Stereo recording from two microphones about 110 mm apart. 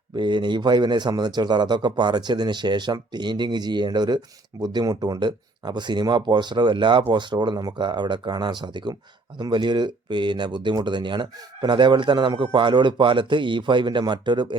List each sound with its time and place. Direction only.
0.2 s a man's voice: 45° right (ahead or behind)